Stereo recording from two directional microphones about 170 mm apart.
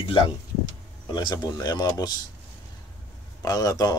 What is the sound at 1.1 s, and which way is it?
Speech, 25° left (ahead or behind).